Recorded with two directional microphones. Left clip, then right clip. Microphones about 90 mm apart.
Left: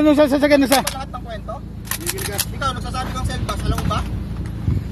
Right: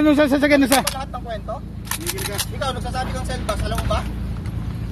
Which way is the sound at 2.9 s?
25° right (ahead or behind).